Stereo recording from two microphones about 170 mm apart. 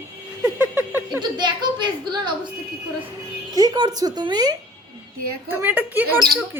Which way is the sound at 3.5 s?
20° right (ahead or behind).